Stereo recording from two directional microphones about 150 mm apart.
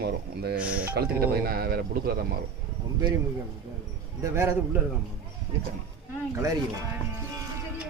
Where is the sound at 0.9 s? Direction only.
85° right.